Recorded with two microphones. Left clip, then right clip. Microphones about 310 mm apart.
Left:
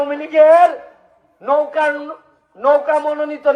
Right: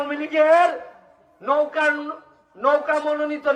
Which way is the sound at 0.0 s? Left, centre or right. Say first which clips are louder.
Left 8 dB; centre.